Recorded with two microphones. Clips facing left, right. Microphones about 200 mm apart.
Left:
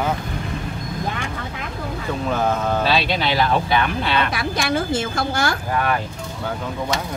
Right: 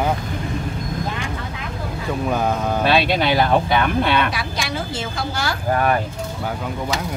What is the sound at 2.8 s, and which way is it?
Speech, 55° right (ahead or behind).